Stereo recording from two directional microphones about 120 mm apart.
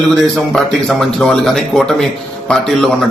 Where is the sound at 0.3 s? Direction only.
Centre (ahead or behind).